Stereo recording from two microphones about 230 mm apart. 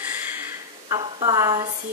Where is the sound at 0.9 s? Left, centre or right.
Centre.